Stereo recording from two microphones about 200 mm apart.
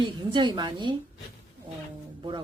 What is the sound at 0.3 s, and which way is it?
Speech, 20° right (ahead or behind).